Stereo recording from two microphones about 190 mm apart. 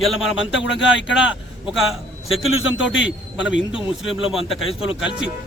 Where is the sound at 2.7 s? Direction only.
75° left (ahead or behind).